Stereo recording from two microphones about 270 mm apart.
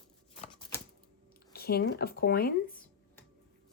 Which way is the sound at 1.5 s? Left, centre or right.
Left.